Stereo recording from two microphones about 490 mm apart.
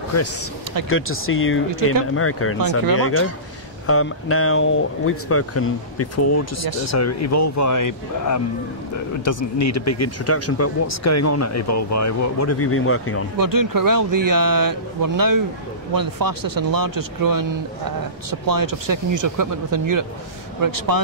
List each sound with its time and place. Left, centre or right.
0.8 s speech: left
13.4 s speech: right